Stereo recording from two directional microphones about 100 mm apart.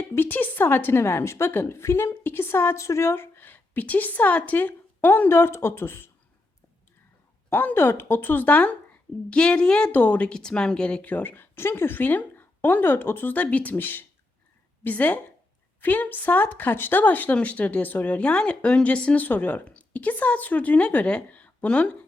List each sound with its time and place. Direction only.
0.1 s a woman's voice: 20° left (ahead or behind)
7.5 s a woman's voice: 20° left (ahead or behind)